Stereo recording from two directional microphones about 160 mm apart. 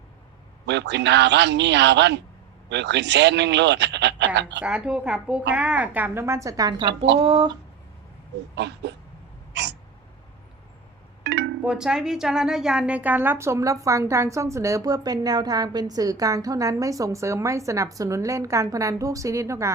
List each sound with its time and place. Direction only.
0.7 s speech: 90° right
4.6 s speech: 5° right (ahead or behind); by 7.5 s 35° right (ahead or behind)
8.5 s speech: 90° right
9.5 s hiccup: 90° right
11.2 s a sound: 90° right
11.6 s a woman's voice: 5° right (ahead or behind)